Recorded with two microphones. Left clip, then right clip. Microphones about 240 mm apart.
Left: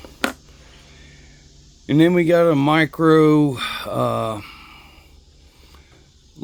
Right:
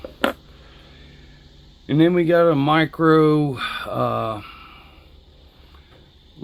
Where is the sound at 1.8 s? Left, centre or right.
Left.